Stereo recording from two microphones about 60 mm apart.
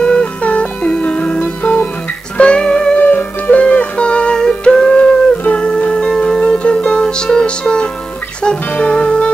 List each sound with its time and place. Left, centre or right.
0.0 s music: centre
3.0 s music: left